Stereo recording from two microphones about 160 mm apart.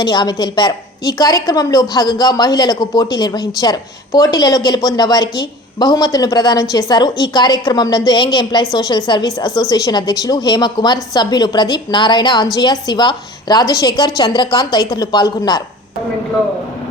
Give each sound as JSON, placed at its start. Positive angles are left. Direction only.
{"t": 0.0, "sound": "a woman's voice", "side_deg": 25}